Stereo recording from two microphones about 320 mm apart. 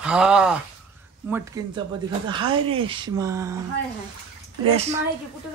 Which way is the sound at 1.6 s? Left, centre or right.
Centre.